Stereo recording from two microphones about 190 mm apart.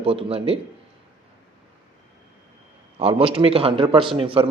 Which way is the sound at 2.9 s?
30° right (ahead or behind).